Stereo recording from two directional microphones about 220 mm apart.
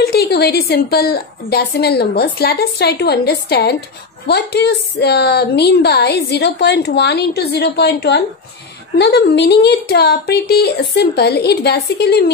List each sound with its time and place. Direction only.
0.0 s a woman's voice: 45° left (ahead or behind)